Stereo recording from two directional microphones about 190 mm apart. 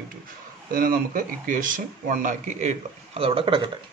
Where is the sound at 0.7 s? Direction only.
45° right (ahead or behind); by 3.7 s 25° right (ahead or behind).